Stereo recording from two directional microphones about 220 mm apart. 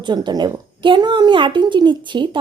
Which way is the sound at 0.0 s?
20° right (ahead or behind).